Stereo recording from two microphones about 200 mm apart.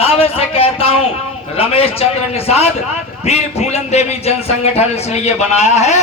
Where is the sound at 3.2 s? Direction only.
35° left (ahead or behind).